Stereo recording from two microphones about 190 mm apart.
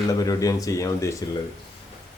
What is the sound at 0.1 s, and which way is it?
Speech, 20° left (ahead or behind).